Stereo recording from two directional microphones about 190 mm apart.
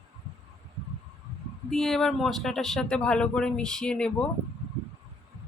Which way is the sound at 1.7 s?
Centre (ahead or behind).